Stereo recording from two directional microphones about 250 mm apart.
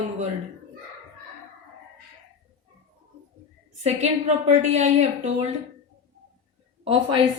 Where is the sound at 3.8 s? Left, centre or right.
Right.